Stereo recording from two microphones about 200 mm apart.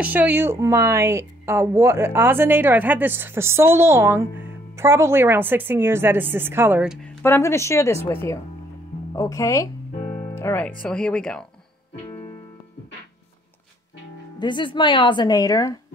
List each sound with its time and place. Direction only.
0.0 s speech: 10° right (ahead or behind)
7.2 s speech: 15° left (ahead or behind)
14.4 s a woman's voice: 25° left (ahead or behind)